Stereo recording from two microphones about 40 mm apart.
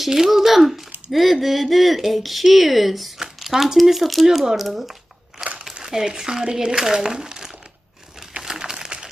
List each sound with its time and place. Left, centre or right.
0.0 s speech: centre
3.2 s a sound: centre
3.8 s speech: centre
5.4 s crumpling: centre
5.8 s speech: centre
8.4 s a sound: centre